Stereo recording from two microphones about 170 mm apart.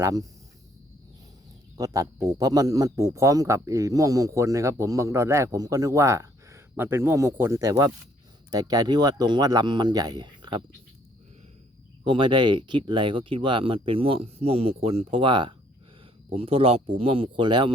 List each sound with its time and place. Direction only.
0.0 s speech: 20° right (ahead or behind)
1.7 s speech: 20° right (ahead or behind)
12.0 s speech: 30° right (ahead or behind)